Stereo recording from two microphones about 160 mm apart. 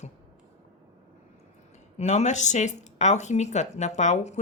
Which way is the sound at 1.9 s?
45° left (ahead or behind).